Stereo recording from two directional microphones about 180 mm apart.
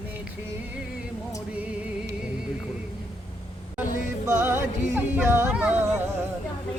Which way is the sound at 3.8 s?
55° left (ahead or behind).